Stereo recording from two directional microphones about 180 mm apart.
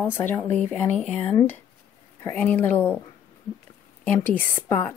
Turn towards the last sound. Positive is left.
turn(degrees=10)  # may be behind; listen again after turning